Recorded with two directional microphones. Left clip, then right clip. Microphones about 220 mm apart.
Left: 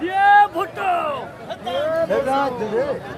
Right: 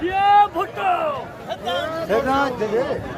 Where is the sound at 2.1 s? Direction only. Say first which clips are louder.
Right 5 dB; 40° right (ahead or behind).